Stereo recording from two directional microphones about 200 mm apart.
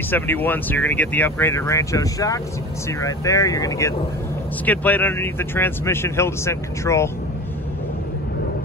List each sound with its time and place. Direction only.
0.1 s speech: 10° left (ahead or behind)